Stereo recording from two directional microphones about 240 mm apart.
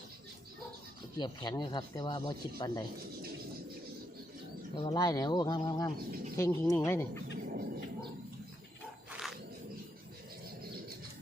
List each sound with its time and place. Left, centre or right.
1.2 s speech: centre
4.8 s speech: centre
7.3 s music: right